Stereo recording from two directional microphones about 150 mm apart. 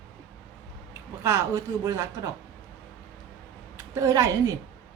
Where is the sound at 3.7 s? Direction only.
20° right (ahead or behind).